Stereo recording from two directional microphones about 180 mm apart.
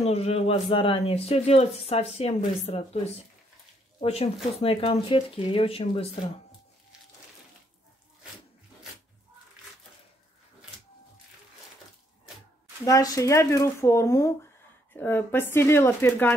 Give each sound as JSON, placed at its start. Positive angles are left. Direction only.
{"t": 0.0, "sound": "speech", "side_deg": 35}
{"t": 4.0, "sound": "speech", "side_deg": 35}
{"t": 12.8, "sound": "speech", "side_deg": 20}